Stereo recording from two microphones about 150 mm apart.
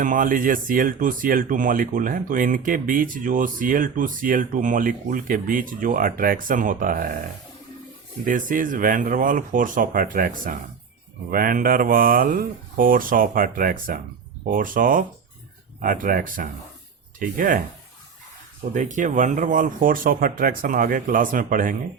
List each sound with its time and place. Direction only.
0.0 s speech: 60° right (ahead or behind)
8.2 s speech: 65° right (ahead or behind)
18.7 s speech: 60° right (ahead or behind)